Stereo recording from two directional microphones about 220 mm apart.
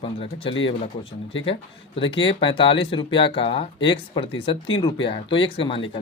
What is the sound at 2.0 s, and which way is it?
Speech, 25° left (ahead or behind).